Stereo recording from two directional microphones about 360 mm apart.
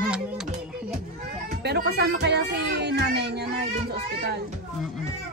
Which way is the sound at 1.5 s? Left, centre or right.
Right.